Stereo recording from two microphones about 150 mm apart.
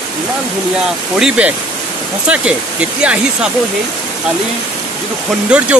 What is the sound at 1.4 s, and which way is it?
Speech, 10° right (ahead or behind).